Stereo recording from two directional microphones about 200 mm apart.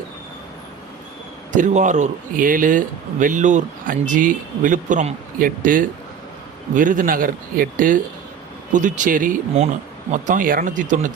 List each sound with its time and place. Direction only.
1.5 s a man's voice: 40° right (ahead or behind)